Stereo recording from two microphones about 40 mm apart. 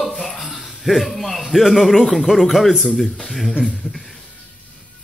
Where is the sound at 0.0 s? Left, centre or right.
Centre.